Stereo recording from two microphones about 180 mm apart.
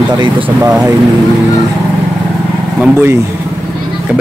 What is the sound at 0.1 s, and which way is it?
Speech, 25° right (ahead or behind).